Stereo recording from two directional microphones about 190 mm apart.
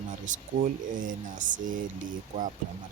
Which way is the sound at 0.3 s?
45° right (ahead or behind).